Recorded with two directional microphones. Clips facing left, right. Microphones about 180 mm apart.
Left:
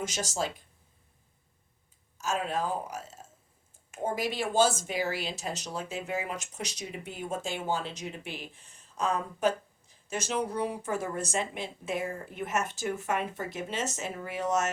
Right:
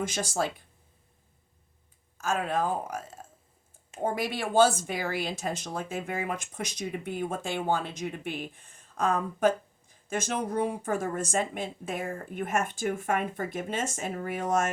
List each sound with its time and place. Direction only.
0.0 s speech: 55° right (ahead or behind)
2.1 s speech: 55° right (ahead or behind)